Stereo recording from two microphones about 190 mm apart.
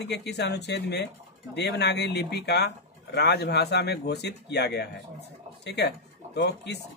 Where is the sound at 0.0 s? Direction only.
60° left (ahead or behind).